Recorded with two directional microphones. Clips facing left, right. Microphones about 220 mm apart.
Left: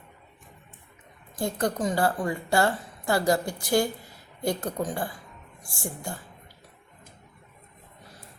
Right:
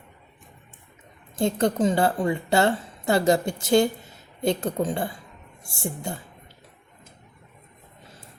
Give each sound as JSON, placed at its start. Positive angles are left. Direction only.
{"t": 1.4, "sound": "a woman's voice", "side_deg": -25}